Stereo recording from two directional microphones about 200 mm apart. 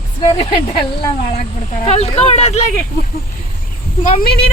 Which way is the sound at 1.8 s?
30° left (ahead or behind).